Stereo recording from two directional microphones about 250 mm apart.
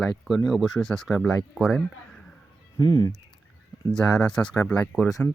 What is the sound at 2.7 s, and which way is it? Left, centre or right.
Speech, centre.